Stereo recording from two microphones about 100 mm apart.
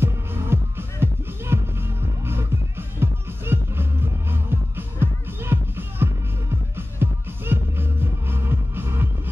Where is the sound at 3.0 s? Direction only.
25° right (ahead or behind).